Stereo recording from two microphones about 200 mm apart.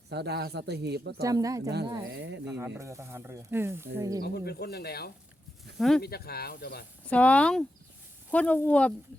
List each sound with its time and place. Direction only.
0.1 s a man's voice: 55° right (ahead or behind)
1.2 s speech: 15° right (ahead or behind)
2.0 s a man's voice: 65° right (ahead or behind)
2.5 s speech: 15° right (ahead or behind)
4.2 s speech: 50° left (ahead or behind)
5.7 s speech: centre (ahead or behind)
6.0 s speech: 50° left (ahead or behind)
7.1 s speech: 5° left (ahead or behind)